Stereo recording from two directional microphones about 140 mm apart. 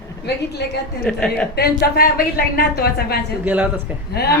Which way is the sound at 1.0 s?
5° left (ahead or behind).